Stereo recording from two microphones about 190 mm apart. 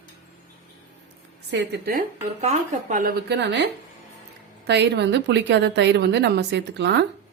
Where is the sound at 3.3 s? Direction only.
65° right (ahead or behind).